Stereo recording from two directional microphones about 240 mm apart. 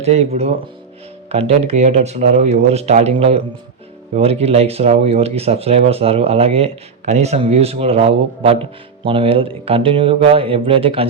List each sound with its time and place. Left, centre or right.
0.0 s speech: right
1.3 s speech: right